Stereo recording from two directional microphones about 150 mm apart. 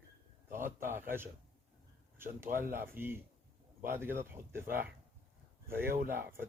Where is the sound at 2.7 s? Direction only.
15° right (ahead or behind).